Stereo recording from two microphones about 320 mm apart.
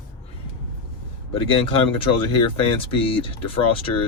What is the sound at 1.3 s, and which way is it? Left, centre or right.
Speech, centre.